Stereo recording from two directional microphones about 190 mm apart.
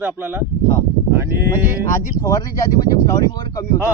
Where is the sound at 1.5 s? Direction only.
15° left (ahead or behind).